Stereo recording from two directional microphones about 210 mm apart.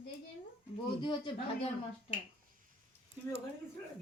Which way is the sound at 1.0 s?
20° left (ahead or behind).